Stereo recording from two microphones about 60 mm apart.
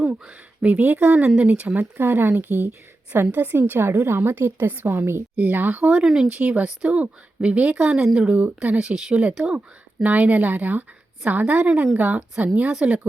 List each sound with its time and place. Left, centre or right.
0.0 s a woman's voice: right
5.4 s a woman's voice: right